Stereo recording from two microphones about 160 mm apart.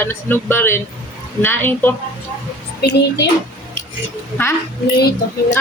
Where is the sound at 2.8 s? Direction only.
90° left.